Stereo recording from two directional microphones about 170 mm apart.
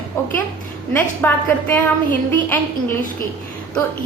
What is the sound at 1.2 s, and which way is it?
Speech, 10° left (ahead or behind).